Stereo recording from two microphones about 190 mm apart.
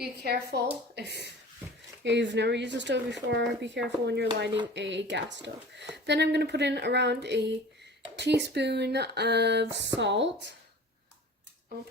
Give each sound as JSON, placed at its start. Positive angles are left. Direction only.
{"t": 0.0, "sound": "speech", "side_deg": -60}